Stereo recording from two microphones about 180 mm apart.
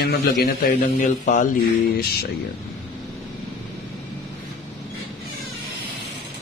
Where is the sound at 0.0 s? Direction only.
65° left (ahead or behind); by 1.5 s 45° left (ahead or behind).